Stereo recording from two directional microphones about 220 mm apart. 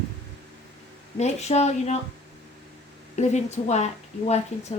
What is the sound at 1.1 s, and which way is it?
Speech, 30° left (ahead or behind).